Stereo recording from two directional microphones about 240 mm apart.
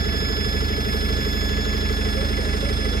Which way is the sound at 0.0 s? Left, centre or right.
Left.